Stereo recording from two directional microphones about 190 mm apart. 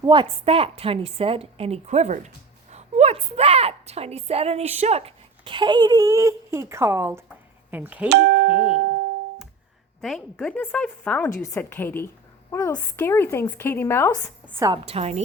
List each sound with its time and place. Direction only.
0.0 s a woman's voice: 25° right (ahead or behind); by 8.1 s 10° right (ahead or behind)
8.4 s speech: 30° left (ahead or behind)
10.0 s a woman's voice: centre (ahead or behind)
14.4 s a woman's voice: 15° right (ahead or behind)
14.8 s a woman's voice: 35° right (ahead or behind)